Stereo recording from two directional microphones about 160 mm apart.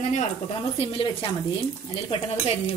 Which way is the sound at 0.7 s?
35° left (ahead or behind).